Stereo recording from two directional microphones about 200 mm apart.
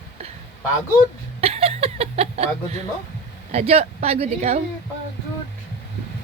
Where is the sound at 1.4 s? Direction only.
30° right (ahead or behind).